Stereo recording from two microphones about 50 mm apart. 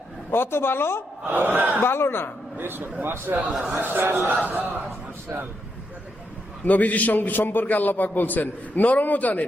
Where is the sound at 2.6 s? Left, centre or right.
Right.